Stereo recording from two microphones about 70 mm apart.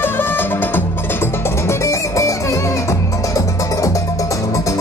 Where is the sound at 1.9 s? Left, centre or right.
Left.